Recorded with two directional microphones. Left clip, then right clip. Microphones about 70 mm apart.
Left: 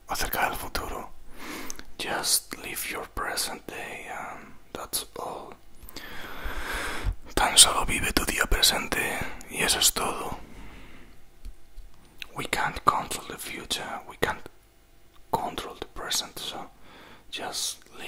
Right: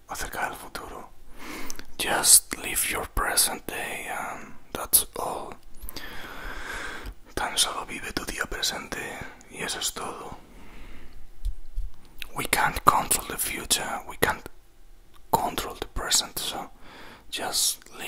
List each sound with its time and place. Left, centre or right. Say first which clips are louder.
0.0 s whispering: left 4 dB; left
1.3 s a sound: right 1 dB; centre
2.0 s whispering: right 5 dB; right
5.9 s music: right 1 dB; centre
6.5 s whispering: left 4 dB; left
10.7 s a sound: even; centre
12.2 s whispering: right 4 dB; right